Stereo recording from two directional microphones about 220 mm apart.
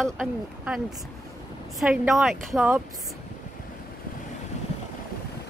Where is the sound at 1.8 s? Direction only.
Centre (ahead or behind).